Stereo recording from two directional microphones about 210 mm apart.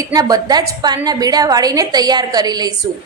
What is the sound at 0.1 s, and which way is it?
A woman's voice, 15° right (ahead or behind).